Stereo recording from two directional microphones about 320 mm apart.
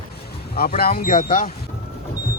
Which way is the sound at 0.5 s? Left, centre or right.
Left.